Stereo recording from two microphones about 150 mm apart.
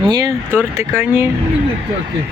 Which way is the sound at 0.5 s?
15° right (ahead or behind).